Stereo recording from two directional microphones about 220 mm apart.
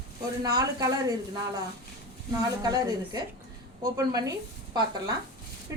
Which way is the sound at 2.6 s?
15° right (ahead or behind).